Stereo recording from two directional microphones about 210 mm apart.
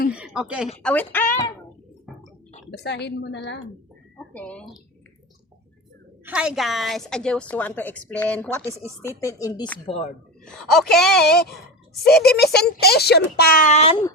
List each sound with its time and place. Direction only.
0.1 s speech: 5° right (ahead or behind)
0.8 s speech: 5° left (ahead or behind)
2.8 s a woman's voice: 55° left (ahead or behind)
4.3 s a woman's voice: 5° left (ahead or behind)
6.2 s a woman's voice: 5° right (ahead or behind); by 9.9 s 20° left (ahead or behind)
10.4 s a woman's voice: centre (ahead or behind)
11.2 s speech: 50° left (ahead or behind); by 14.0 s 30° left (ahead or behind)